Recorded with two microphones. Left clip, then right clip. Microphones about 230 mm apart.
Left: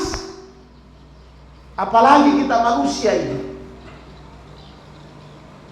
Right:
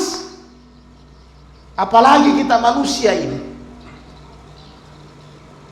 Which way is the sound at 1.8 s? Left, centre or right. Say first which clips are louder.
Right 2 dB; right.